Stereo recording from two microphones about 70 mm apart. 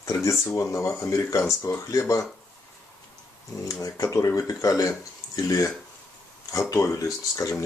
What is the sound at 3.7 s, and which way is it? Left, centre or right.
Speech, left.